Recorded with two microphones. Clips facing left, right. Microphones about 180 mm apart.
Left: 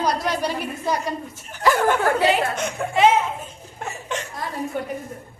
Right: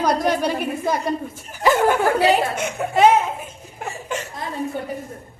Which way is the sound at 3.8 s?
5° right (ahead or behind).